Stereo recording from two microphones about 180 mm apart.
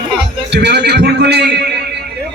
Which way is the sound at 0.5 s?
70° right (ahead or behind).